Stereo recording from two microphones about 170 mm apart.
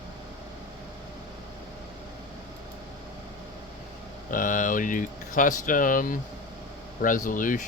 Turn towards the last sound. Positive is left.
turn(degrees=50)  # may be behind; listen again after turning